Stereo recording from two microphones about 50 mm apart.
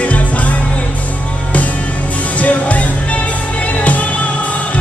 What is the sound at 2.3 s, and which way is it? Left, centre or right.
Music, left.